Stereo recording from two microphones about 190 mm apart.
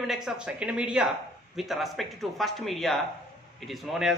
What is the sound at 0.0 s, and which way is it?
Speech, centre (ahead or behind).